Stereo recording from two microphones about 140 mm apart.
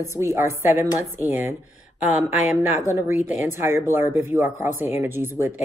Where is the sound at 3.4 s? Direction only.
15° right (ahead or behind).